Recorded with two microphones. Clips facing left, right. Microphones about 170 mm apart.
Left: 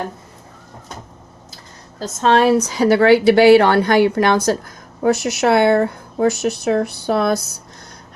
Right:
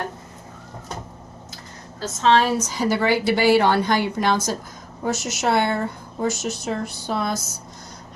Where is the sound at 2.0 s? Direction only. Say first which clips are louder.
Left 3 dB; 55° left (ahead or behind).